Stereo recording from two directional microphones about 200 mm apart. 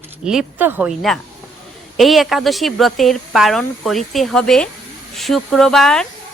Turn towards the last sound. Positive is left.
turn(degrees=0)  # may be behind; listen again after turning